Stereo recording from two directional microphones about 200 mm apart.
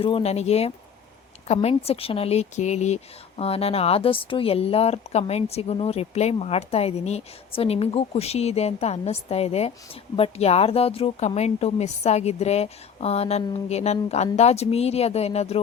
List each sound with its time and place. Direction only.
0.0 s speech: 30° left (ahead or behind)